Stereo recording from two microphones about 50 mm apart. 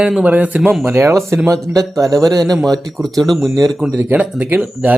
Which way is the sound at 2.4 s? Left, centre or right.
Centre.